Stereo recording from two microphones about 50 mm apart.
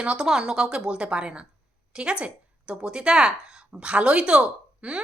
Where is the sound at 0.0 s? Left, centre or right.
Right.